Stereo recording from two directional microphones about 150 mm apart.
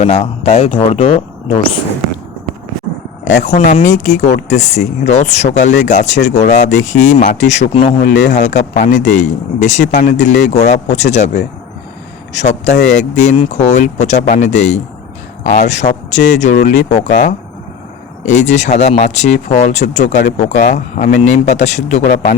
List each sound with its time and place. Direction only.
0.0 s speech: 40° left (ahead or behind)
3.3 s speech: 55° left (ahead or behind)
8.0 s speech: 55° left (ahead or behind)